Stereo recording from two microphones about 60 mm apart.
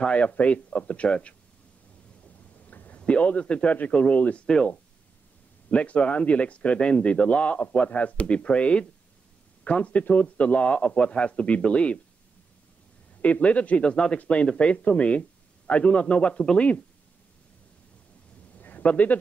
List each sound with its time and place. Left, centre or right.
0.0 s speech: left
2.6 s a sound: left
3.0 s speech: centre
5.7 s speech: left
13.2 s speech: left
18.6 s a sound: left